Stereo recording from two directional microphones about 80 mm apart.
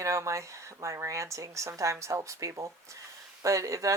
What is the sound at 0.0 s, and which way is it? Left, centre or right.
Speech, right.